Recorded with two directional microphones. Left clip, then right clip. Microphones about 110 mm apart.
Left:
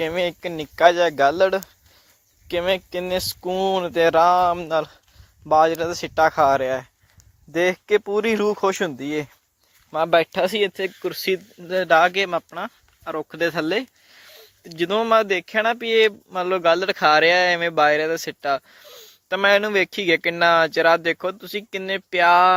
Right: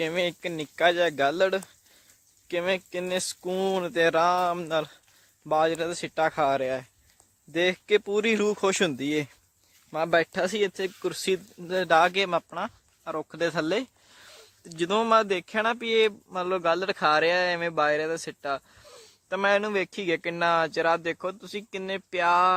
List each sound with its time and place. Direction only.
0.0 s speech: 5° left (ahead or behind)
2.5 s speech: 15° left (ahead or behind)
3.5 s speech: centre (ahead or behind)
8.8 s speech: 25° right (ahead or behind)
9.9 s speech: 5° left (ahead or behind)
13.1 s speech: 15° left (ahead or behind)
14.8 s speech: centre (ahead or behind); by 22.5 s 20° left (ahead or behind)